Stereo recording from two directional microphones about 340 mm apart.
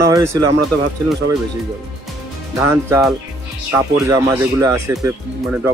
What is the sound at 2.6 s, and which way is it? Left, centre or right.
Speech, centre.